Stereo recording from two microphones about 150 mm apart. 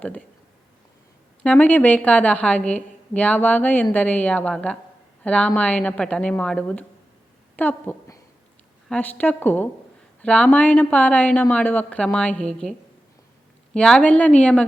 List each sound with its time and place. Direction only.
0.0 s speech: 10° left (ahead or behind)
1.5 s a woman's voice: 10° left (ahead or behind)
13.7 s speech: 5° left (ahead or behind)